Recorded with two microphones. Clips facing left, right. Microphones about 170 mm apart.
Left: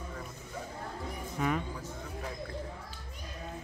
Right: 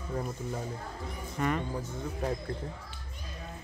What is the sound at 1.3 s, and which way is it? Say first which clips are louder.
Speech: right 1 dB; 5° left (ahead or behind).